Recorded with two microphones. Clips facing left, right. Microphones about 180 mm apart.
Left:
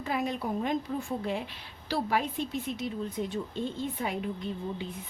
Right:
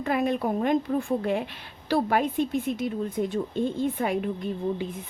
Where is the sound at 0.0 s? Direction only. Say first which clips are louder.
Right 6 dB; 60° right (ahead or behind).